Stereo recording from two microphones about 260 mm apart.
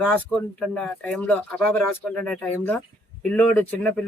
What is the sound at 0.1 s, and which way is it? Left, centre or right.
Speech, centre.